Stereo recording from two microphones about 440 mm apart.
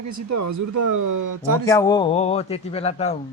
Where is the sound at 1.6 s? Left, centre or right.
Centre.